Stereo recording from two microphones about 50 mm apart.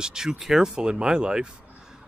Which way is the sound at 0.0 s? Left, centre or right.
Centre.